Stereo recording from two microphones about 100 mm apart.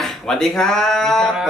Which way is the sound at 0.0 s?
5° left (ahead or behind).